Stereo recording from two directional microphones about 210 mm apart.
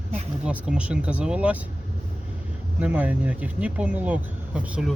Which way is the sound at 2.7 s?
10° right (ahead or behind).